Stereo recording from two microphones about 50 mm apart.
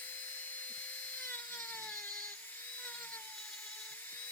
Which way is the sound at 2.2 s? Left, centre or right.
Left.